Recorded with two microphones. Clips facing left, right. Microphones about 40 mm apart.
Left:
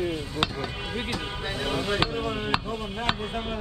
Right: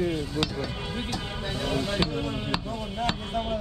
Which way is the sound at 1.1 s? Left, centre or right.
Centre.